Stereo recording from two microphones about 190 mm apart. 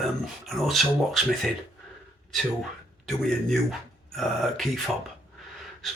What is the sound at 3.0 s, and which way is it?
Speech, centre (ahead or behind).